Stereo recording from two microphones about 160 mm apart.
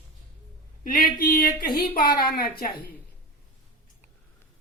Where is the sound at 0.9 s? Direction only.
65° left (ahead or behind).